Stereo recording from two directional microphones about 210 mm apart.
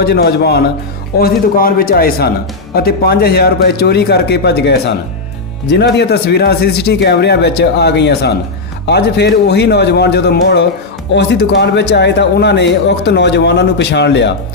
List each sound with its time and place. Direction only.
0.0 s a man's voice: 50° left (ahead or behind)